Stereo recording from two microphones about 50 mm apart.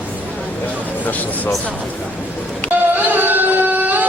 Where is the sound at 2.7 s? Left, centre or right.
Right.